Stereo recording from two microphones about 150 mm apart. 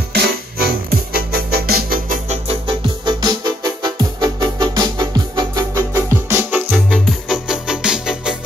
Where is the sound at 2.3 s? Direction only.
35° right (ahead or behind).